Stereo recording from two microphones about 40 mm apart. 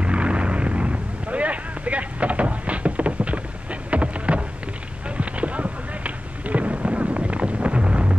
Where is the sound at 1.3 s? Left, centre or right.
Right.